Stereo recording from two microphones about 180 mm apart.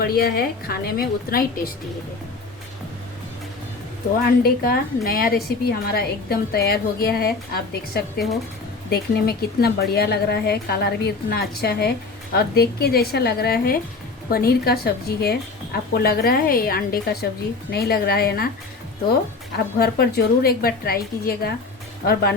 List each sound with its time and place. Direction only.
0.0 s a woman's voice: 55° left (ahead or behind)
4.4 s a woman's voice: 55° left (ahead or behind)
19.5 s a woman's voice: 60° left (ahead or behind)